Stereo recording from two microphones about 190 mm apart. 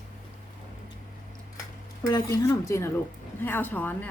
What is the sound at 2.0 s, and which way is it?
A woman's voice, 15° left (ahead or behind).